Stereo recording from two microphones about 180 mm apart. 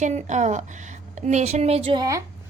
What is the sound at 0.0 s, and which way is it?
A woman's voice, 40° right (ahead or behind).